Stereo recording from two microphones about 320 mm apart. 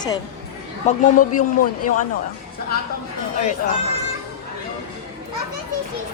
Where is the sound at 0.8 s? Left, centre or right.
Left.